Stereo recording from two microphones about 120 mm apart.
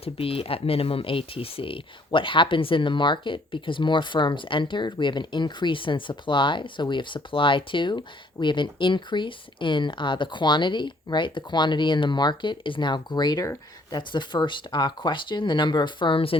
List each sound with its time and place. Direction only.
0.0 s speech: 50° left (ahead or behind)